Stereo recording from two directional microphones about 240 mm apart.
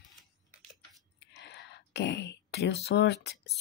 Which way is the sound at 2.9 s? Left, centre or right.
Left.